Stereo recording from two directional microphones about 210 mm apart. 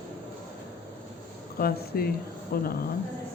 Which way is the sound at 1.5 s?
45° left (ahead or behind).